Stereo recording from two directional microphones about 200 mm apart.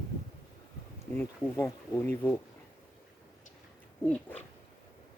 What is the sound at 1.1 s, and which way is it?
Speech, 10° left (ahead or behind).